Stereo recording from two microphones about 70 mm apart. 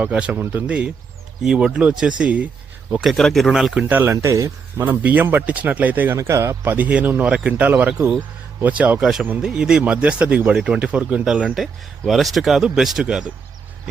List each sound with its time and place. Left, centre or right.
0.0 s speech: centre
1.5 s speech: centre
3.0 s speech: centre
3.8 s speech: right
4.1 s speech: right
4.8 s speech: right
6.1 s speech: right
6.7 s speech: right
9.4 s speech: centre
10.5 s speech: centre